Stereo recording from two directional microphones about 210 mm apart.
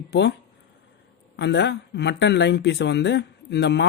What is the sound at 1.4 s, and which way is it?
Speech, 55° left (ahead or behind).